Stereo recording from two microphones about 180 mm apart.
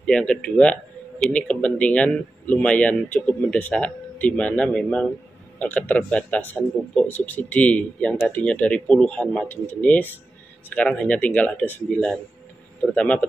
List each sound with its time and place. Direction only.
0.0 s speech: 5° left (ahead or behind)